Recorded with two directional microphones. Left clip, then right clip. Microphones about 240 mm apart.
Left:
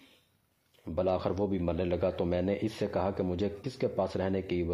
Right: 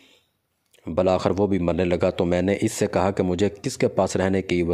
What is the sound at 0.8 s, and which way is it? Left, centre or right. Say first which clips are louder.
Speech: right 9 dB; right.